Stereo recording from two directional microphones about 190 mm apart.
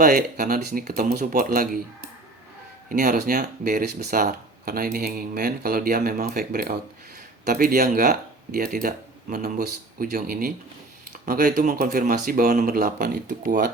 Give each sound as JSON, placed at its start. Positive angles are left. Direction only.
{"t": 0.0, "sound": "speech", "side_deg": -50}
{"t": 2.9, "sound": "speech", "side_deg": -55}